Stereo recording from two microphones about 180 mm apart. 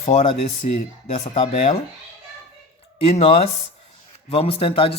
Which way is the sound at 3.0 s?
35° left (ahead or behind).